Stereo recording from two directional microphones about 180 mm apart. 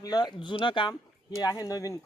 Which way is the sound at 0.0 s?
20° left (ahead or behind).